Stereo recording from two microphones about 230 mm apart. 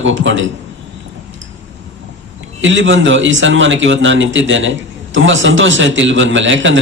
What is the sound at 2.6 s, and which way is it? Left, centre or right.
A man's voice, right.